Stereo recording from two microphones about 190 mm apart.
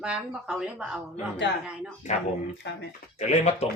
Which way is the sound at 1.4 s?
70° left (ahead or behind).